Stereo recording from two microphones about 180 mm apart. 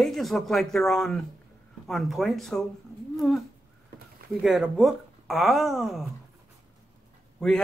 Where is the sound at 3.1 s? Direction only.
Centre (ahead or behind).